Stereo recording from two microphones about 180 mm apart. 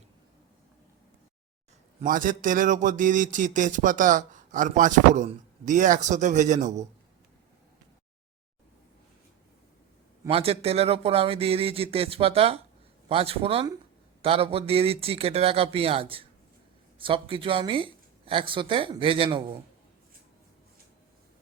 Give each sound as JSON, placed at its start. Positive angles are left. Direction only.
{"t": 2.0, "sound": "speech", "side_deg": -50}
{"t": 10.2, "sound": "speech", "side_deg": -30}